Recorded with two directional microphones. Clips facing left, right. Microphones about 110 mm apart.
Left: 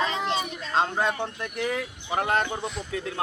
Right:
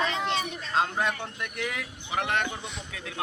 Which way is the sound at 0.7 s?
30° left (ahead or behind).